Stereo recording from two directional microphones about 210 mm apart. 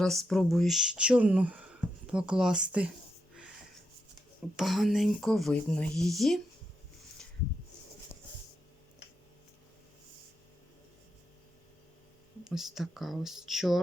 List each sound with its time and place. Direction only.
0.0 s speech: centre (ahead or behind)
4.5 s speech: centre (ahead or behind)
12.5 s speech: centre (ahead or behind)